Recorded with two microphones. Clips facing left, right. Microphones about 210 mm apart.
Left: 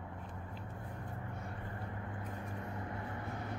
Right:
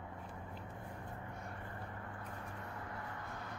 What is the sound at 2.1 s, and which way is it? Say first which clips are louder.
Vehicle: left 4 dB; 25° left (ahead or behind).